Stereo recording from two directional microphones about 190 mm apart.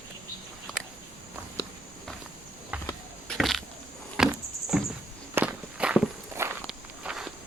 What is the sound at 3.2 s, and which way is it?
Arrow, centre (ahead or behind).